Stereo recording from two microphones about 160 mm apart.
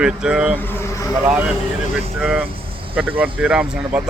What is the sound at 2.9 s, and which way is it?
Speech, 10° right (ahead or behind).